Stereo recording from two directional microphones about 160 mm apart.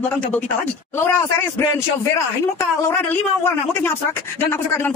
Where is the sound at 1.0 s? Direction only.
15° left (ahead or behind).